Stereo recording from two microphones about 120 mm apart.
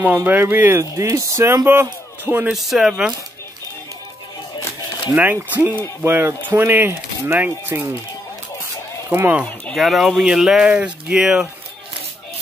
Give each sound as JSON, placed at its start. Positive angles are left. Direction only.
{"t": 0.0, "sound": "speech", "side_deg": -15}
{"t": 2.5, "sound": "speech", "side_deg": 0}
{"t": 5.1, "sound": "speech", "side_deg": -15}
{"t": 9.1, "sound": "speech", "side_deg": -20}
{"t": 9.8, "sound": "speech", "side_deg": 0}